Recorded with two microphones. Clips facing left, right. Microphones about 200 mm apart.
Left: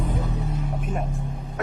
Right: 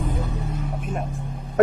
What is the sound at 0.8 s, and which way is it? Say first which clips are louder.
Music: even; centre (ahead or behind).